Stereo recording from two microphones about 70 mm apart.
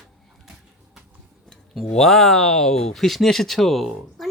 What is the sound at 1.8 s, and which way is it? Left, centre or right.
Speech, centre.